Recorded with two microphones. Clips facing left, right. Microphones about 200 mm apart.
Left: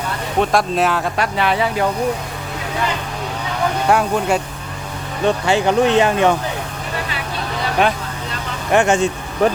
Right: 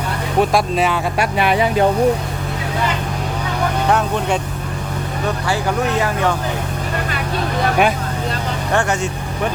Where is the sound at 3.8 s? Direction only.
5° left (ahead or behind).